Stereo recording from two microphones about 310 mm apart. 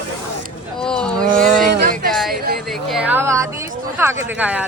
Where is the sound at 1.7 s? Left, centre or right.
Right.